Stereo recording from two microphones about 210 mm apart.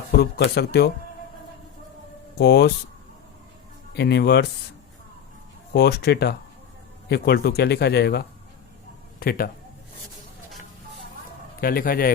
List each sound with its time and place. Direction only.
0.2 s speech: 50° left (ahead or behind)
2.4 s speech: 50° left (ahead or behind)
3.9 s speech: 50° left (ahead or behind)
5.7 s speech: 50° left (ahead or behind)
11.6 s speech: 45° left (ahead or behind)